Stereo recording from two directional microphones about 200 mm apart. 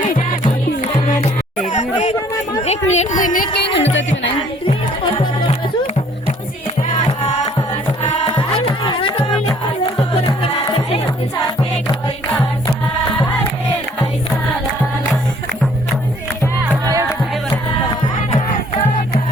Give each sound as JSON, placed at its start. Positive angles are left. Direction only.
{"t": 0.8, "sound": "music", "side_deg": 40}
{"t": 1.6, "sound": "chatter", "side_deg": 40}
{"t": 2.6, "sound": "a sound", "side_deg": 35}
{"t": 3.8, "sound": "a sound", "side_deg": 65}
{"t": 8.0, "sound": "music", "side_deg": 30}
{"t": 12.0, "sound": "music", "side_deg": 15}
{"t": 16.6, "sound": "music", "side_deg": -15}
{"t": 18.3, "sound": "music", "side_deg": 35}